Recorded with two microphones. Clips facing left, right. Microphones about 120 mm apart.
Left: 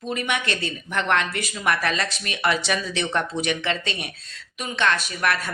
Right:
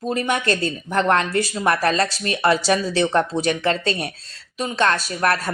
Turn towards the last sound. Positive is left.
turn(degrees=-40)  # may be behind; listen again after turning